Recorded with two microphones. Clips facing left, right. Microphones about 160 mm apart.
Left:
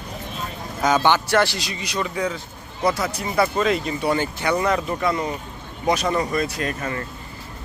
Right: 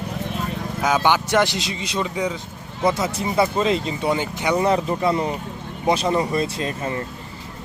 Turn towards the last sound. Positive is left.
turn(degrees=-25)  # may be behind; listen again after turning